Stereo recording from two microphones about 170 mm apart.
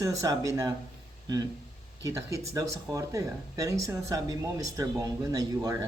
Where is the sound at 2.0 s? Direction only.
15° right (ahead or behind).